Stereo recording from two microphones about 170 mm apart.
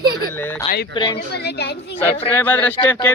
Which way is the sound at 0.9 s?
30° left (ahead or behind).